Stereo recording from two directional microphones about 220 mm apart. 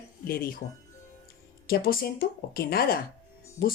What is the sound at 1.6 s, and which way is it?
Speech, 40° left (ahead or behind).